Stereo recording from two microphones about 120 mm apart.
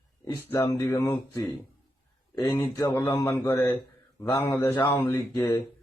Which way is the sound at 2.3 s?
25° left (ahead or behind).